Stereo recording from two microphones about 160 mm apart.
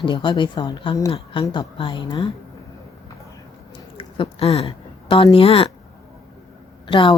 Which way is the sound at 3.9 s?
35° left (ahead or behind).